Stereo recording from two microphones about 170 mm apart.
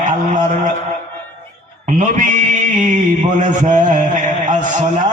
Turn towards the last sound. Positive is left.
turn(degrees=-45)  # may be behind; listen again after turning